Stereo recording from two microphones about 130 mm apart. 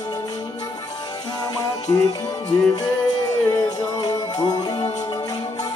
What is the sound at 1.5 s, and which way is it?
Music, 30° left (ahead or behind).